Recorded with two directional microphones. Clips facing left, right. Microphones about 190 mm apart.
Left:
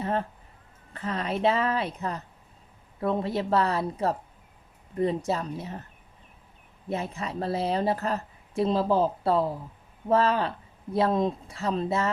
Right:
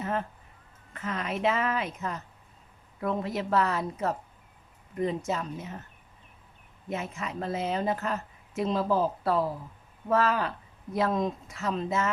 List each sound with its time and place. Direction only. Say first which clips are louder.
0.0 s a sound: left 3 dB; 35° left (ahead or behind)
0.9 s speech: left 3 dB; 35° left (ahead or behind)
6.8 s speech: left 3 dB; 35° left (ahead or behind)